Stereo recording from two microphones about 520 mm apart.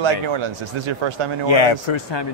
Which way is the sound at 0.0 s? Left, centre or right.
Right.